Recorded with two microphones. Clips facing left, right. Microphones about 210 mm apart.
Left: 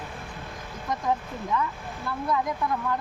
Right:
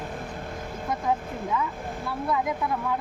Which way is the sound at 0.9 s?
5° right (ahead or behind).